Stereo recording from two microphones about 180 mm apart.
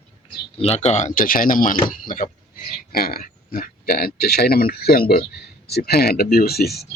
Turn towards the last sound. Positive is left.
turn(degrees=60)  # may be behind; listen again after turning